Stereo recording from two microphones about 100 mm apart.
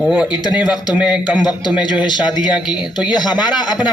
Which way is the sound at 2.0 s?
45° left (ahead or behind).